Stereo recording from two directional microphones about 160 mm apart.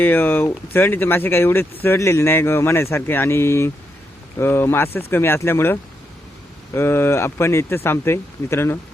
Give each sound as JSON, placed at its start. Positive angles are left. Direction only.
{"t": 0.0, "sound": "speech", "side_deg": 10}